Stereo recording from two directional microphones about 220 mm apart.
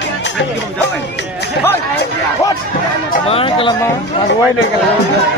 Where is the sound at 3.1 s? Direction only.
25° left (ahead or behind).